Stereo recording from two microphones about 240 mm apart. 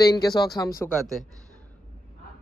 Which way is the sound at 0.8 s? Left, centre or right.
Centre.